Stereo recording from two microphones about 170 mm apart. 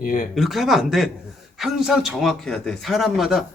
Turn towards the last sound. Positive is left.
turn(degrees=0)  # may be behind; listen again after turning